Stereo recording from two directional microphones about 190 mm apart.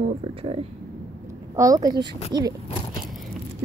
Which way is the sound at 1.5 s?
20° right (ahead or behind).